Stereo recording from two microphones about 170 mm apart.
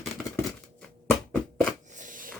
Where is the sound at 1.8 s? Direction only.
50° right (ahead or behind).